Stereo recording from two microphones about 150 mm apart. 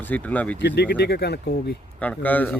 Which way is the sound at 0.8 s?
90° left.